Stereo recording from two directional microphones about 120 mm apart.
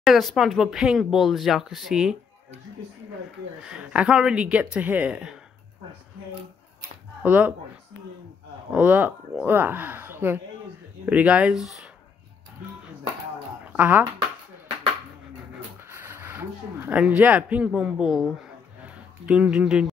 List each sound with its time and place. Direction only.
0.0 s speech: centre (ahead or behind)
3.6 s speech: 10° right (ahead or behind)
7.2 s speech: 15° right (ahead or behind)
8.7 s speech: 15° right (ahead or behind)
13.7 s speech: 15° right (ahead or behind)
15.9 s a sound: 20° right (ahead or behind)
17.6 s speech: 5° right (ahead or behind)